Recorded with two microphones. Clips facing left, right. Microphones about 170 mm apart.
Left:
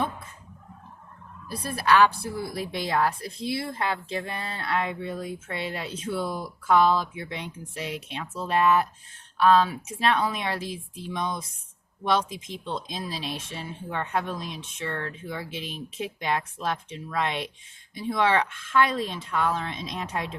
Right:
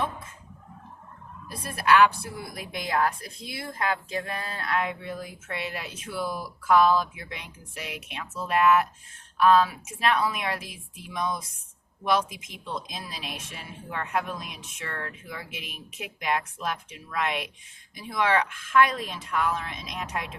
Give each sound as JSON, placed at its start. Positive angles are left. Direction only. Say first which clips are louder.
{"t": 1.5, "sound": "a woman's voice", "louder": "even", "side_deg": 30}